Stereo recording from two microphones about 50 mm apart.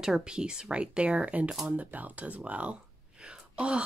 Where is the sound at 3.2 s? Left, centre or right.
Right.